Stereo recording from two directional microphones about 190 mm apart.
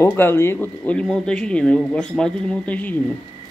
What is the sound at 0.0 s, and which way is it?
Speech, 10° left (ahead or behind).